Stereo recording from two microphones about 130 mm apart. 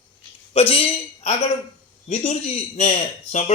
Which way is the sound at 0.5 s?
50° left (ahead or behind).